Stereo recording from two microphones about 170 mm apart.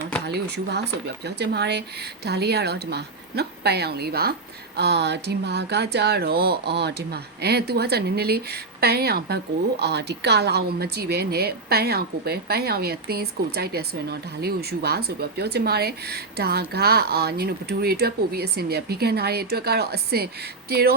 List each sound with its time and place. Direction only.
0.3 s a woman's voice: 75° right (ahead or behind)
4.8 s a woman's voice: 80° right